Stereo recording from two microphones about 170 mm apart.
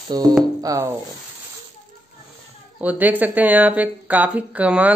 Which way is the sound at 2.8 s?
10° right (ahead or behind).